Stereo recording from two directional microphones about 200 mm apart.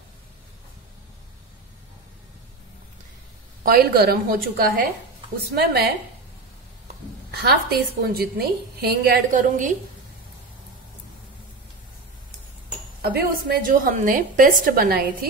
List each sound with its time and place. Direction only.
3.6 s a woman's voice: 50° right (ahead or behind)
7.2 s a woman's voice: 50° right (ahead or behind)
13.0 s a woman's voice: 50° right (ahead or behind)